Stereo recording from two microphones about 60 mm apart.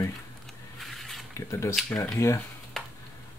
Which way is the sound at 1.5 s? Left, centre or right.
Left.